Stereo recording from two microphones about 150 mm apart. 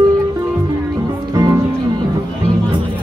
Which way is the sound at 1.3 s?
25° right (ahead or behind).